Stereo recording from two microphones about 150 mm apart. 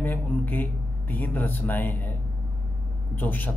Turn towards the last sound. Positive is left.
turn(degrees=10)  # may be behind; listen again after turning